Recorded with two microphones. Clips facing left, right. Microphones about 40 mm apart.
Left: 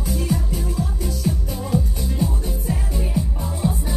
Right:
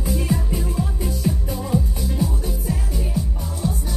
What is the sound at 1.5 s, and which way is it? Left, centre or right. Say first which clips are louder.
Music: even; centre.